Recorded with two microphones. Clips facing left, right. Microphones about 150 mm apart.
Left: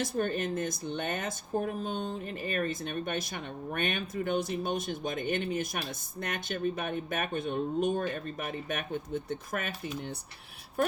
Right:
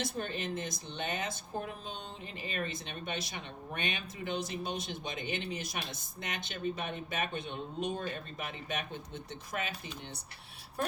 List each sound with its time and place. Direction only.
0.0 s speech: 50° left (ahead or behind)